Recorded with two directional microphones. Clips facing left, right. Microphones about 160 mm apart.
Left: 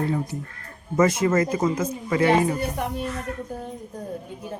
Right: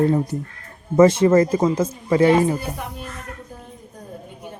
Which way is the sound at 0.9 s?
30° right (ahead or behind).